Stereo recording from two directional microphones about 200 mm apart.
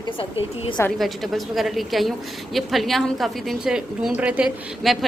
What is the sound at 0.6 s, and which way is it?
Speech, 25° left (ahead or behind).